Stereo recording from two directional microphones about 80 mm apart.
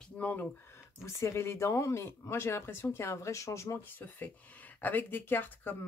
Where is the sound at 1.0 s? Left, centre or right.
Left.